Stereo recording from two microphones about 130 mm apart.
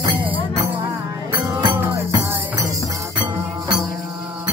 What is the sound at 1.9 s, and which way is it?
Music, 20° right (ahead or behind).